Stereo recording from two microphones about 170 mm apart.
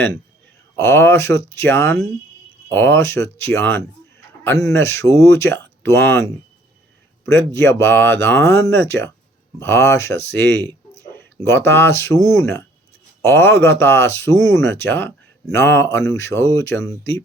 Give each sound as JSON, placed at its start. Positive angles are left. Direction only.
{"t": 0.8, "sound": "speech", "side_deg": 15}